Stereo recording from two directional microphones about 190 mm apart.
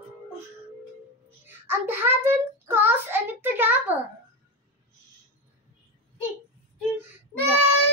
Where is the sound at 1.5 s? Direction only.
10° right (ahead or behind).